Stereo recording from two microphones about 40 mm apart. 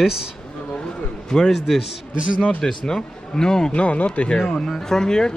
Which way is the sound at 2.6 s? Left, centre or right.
Centre.